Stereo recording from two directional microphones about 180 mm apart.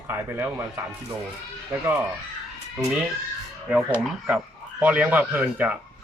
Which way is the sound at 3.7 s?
5° right (ahead or behind).